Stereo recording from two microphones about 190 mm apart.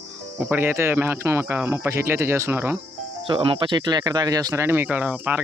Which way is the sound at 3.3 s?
25° right (ahead or behind).